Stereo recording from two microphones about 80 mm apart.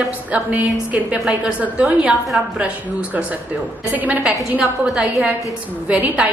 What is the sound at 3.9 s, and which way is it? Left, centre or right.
A woman's voice, centre.